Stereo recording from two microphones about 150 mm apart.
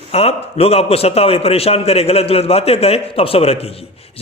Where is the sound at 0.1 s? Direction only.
45° left (ahead or behind).